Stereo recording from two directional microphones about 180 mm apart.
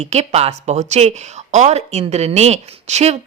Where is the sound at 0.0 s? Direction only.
40° right (ahead or behind).